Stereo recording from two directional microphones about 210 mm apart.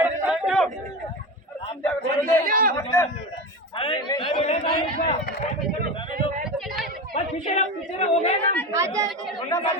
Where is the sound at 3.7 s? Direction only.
25° left (ahead or behind).